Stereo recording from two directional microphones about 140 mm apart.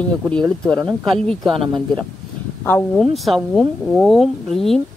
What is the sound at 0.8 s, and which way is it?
Speech, 5° left (ahead or behind).